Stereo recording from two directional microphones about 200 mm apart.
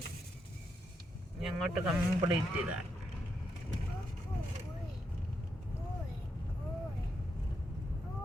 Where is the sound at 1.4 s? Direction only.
Centre (ahead or behind).